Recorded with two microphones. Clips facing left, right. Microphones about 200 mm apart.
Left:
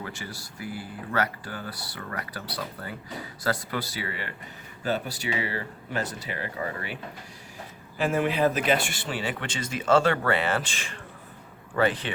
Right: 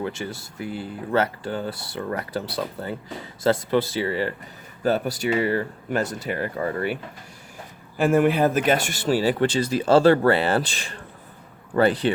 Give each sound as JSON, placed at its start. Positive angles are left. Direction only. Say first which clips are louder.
{"t": 0.0, "sound": "speech", "louder": "right 8 dB", "side_deg": -25}
{"t": 5.4, "sound": "speech", "louder": "right 9 dB", "side_deg": -50}